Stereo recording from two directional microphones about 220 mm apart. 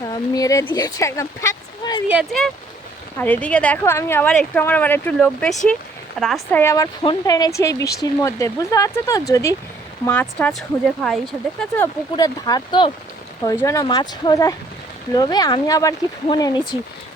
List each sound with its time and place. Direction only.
0.1 s speech: 15° left (ahead or behind)
2.0 s speech: 5° right (ahead or behind)
3.2 s speech: 10° left (ahead or behind)
12.1 s speech: 20° left (ahead or behind)